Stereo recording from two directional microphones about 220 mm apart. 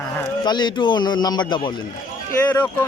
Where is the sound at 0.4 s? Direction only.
20° left (ahead or behind).